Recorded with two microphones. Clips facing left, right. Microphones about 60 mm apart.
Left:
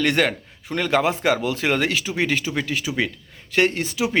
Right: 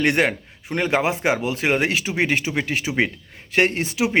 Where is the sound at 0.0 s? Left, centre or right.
Centre.